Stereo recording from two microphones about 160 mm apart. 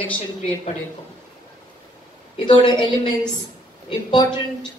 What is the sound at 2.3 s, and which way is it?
Speech, 30° left (ahead or behind).